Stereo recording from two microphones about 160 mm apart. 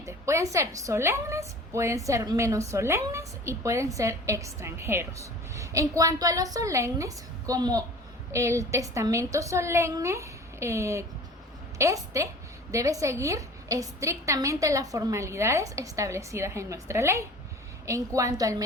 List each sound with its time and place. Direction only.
0.0 s a woman's voice: 20° right (ahead or behind)